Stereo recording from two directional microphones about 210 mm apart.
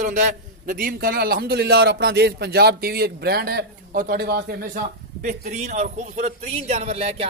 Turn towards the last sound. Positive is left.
turn(degrees=-30)  # may be behind; listen again after turning